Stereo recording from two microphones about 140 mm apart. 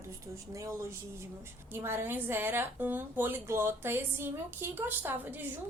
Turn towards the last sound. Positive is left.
turn(degrees=-15)  # may be behind; listen again after turning